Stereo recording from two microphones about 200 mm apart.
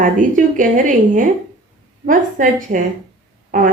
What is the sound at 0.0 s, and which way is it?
A woman's voice, 40° right (ahead or behind).